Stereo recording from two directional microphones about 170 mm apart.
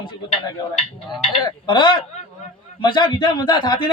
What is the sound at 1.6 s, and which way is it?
A man's voice, 30° left (ahead or behind).